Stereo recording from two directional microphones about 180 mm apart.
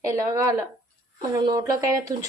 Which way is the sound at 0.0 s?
20° right (ahead or behind).